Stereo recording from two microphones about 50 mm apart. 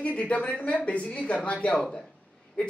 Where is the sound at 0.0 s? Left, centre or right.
Left.